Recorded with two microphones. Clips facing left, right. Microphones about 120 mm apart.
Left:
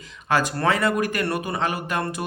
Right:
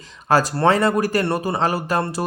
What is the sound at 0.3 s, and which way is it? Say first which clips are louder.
Speech: right 5 dB; 35° right (ahead or behind).